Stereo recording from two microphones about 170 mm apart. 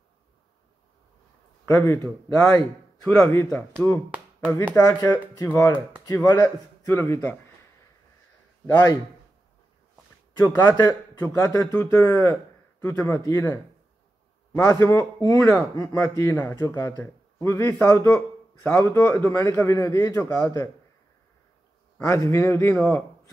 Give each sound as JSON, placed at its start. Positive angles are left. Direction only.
{"t": 1.7, "sound": "speech", "side_deg": 15}
{"t": 4.7, "sound": "speech", "side_deg": 20}
{"t": 8.6, "sound": "speech", "side_deg": 20}
{"t": 10.4, "sound": "speech", "side_deg": 10}
{"t": 21.9, "sound": "a man's voice", "side_deg": 15}